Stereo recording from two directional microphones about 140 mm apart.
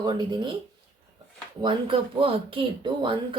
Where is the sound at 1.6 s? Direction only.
40° right (ahead or behind).